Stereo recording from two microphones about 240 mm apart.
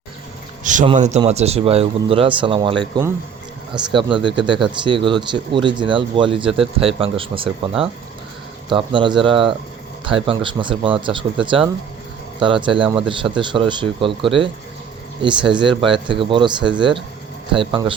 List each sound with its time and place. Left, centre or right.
0.6 s speech: right
4.2 s speech: centre
8.7 s speech: centre